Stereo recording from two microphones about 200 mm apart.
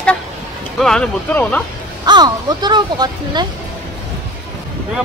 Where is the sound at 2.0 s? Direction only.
20° right (ahead or behind).